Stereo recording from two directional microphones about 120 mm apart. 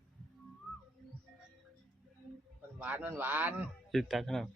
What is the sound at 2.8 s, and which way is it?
Speech, 15° right (ahead or behind).